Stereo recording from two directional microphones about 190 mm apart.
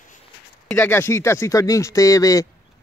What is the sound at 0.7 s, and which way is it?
Speech, 10° left (ahead or behind).